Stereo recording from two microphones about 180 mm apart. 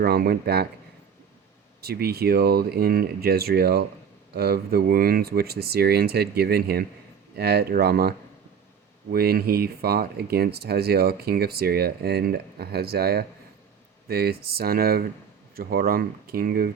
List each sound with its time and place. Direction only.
0.0 s speech: 60° right (ahead or behind)
1.8 s speech: 60° right (ahead or behind)
9.1 s speech: 60° right (ahead or behind)